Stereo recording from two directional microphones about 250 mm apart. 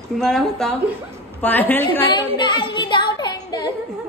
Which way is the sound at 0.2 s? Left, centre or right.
Centre.